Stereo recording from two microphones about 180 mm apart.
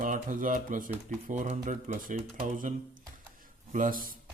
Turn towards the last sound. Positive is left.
turn(degrees=-50)  # may be behind; listen again after turning